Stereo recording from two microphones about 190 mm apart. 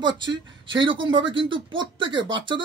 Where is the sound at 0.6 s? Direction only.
25° right (ahead or behind).